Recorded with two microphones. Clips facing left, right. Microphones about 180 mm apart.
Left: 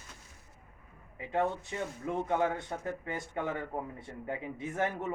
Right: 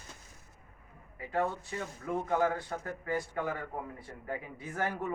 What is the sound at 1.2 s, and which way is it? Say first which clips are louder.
A man's voice: left 1 dB; 20° left (ahead or behind).